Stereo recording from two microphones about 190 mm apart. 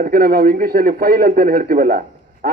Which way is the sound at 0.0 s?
50° right (ahead or behind).